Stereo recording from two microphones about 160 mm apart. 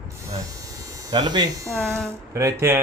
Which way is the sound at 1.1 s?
25° right (ahead or behind).